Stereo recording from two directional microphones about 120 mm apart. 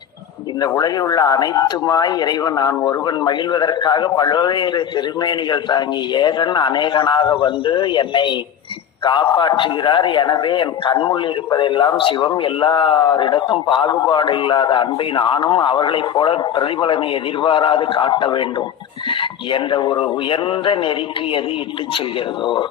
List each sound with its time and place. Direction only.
0.6 s a man's voice: 35° left (ahead or behind)
19.5 s speech: 40° left (ahead or behind)